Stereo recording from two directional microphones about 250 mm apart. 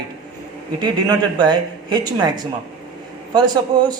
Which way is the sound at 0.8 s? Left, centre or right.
Centre.